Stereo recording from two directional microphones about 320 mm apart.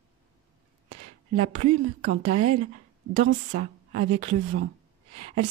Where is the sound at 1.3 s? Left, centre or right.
Centre.